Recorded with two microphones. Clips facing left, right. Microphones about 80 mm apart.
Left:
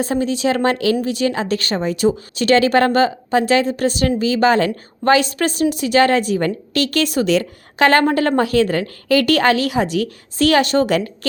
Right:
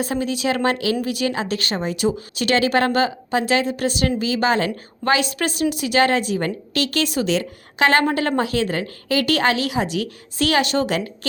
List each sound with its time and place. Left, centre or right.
0.0 s a woman's voice: left